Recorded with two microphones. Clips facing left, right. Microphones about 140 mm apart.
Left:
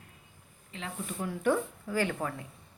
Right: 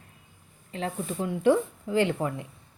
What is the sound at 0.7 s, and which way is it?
Speech, 35° right (ahead or behind).